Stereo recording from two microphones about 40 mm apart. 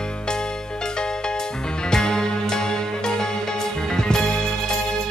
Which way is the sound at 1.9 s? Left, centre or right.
Centre.